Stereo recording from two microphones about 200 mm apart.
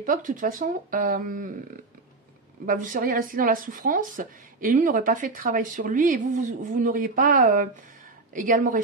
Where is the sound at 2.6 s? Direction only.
40° right (ahead or behind).